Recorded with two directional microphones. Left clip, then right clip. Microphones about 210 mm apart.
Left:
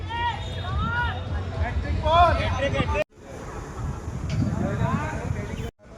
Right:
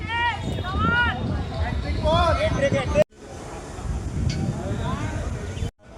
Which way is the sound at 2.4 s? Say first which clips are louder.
Right 4 dB; 30° left (ahead or behind).